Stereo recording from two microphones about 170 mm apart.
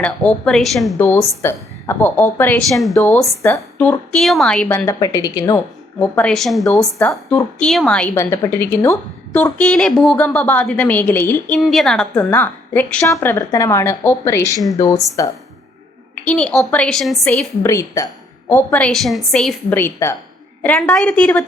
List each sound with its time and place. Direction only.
0.0 s a woman's voice: 5° left (ahead or behind)
1.4 s a woman's voice: 15° left (ahead or behind)
2.6 s a woman's voice: centre (ahead or behind)
3.4 s a woman's voice: 10° left (ahead or behind)
4.9 s a woman's voice: 20° left (ahead or behind)
11.6 s a woman's voice: centre (ahead or behind); by 15.3 s 20° left (ahead or behind)
16.2 s a woman's voice: 5° left (ahead or behind)
17.6 s a woman's voice: 20° left (ahead or behind)